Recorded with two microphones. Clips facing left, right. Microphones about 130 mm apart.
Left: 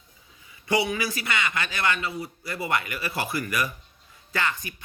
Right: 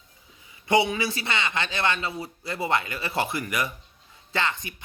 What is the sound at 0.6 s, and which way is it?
Speech, 25° right (ahead or behind).